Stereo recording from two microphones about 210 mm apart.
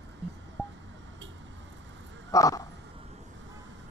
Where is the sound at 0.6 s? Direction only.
10° left (ahead or behind).